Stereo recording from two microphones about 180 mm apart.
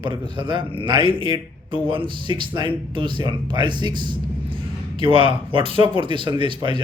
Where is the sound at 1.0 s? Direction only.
30° left (ahead or behind).